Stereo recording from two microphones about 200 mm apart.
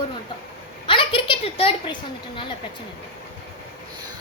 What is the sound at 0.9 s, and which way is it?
A woman's voice, 25° left (ahead or behind).